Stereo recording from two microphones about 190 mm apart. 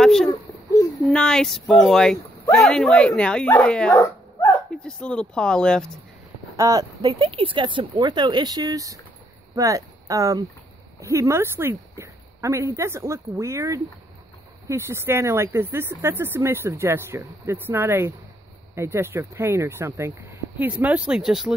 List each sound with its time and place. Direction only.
0.0 s a child's voice: centre (ahead or behind)
3.9 s dog: 20° left (ahead or behind)
4.8 s speech: 5° left (ahead or behind)
6.5 s speech: 15° right (ahead or behind); by 21.5 s centre (ahead or behind)